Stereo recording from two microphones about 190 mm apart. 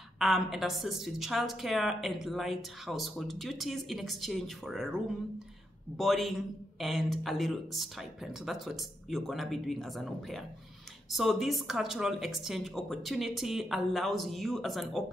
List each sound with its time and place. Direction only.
0.2 s a woman's voice: centre (ahead or behind)